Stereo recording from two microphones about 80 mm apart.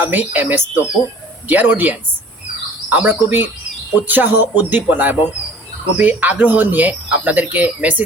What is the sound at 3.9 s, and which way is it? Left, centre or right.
Speech, right.